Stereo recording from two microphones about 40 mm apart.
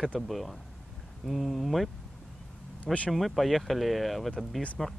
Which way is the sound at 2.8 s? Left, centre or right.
Left.